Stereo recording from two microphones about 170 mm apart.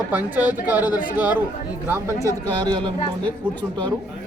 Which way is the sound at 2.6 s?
30° right (ahead or behind).